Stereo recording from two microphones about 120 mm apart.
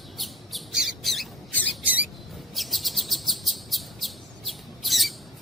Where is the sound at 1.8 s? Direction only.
10° right (ahead or behind).